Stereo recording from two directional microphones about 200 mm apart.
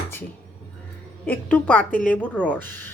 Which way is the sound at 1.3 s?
10° left (ahead or behind).